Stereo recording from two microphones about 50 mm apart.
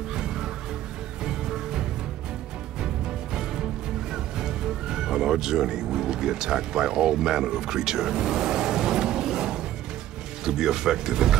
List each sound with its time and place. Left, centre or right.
0.1 s music: centre
4.1 s music: centre
10.4 s speech: centre